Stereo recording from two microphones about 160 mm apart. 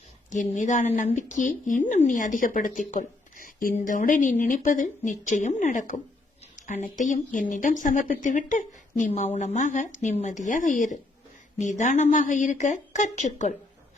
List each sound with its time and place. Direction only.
0.3 s speech: 50° left (ahead or behind)